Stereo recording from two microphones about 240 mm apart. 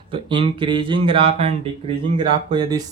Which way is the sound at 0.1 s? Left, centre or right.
Right.